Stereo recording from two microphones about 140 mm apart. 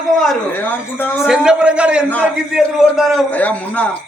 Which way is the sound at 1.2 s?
5° right (ahead or behind).